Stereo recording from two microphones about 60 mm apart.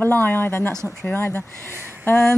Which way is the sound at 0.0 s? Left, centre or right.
Left.